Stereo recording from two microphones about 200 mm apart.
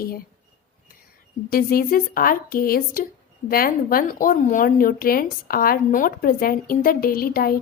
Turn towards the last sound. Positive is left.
turn(degrees=45)  # may be behind; listen again after turning